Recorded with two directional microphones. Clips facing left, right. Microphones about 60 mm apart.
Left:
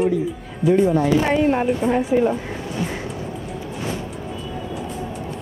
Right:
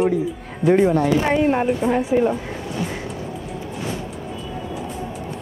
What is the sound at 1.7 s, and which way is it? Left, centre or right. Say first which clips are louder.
Speech: even; centre.